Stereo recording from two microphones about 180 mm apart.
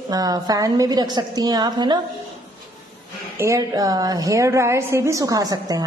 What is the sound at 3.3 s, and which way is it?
A woman's voice, 15° right (ahead or behind).